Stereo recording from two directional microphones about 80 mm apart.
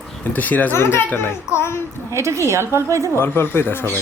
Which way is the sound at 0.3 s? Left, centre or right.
Centre.